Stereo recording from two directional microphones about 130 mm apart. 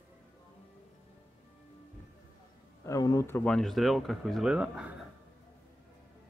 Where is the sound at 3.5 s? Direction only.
5° left (ahead or behind).